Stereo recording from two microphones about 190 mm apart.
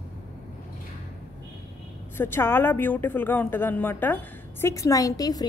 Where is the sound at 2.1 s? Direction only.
10° left (ahead or behind).